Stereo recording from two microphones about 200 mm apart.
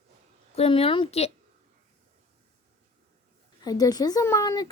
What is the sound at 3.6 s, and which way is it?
Speech, 20° left (ahead or behind).